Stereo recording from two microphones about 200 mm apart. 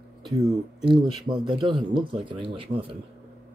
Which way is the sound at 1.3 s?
25° right (ahead or behind).